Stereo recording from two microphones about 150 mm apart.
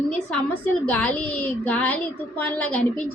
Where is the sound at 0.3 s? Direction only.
10° left (ahead or behind).